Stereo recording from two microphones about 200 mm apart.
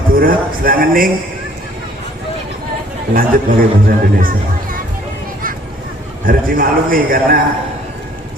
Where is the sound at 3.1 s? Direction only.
45° right (ahead or behind).